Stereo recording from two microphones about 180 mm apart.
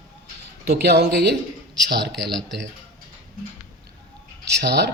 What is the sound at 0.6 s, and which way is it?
Speech, 65° right (ahead or behind).